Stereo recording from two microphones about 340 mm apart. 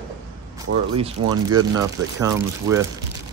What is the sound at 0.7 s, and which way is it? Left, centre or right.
Speech, right.